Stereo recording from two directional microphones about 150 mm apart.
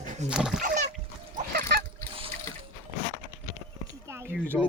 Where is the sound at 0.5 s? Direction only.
55° right (ahead or behind).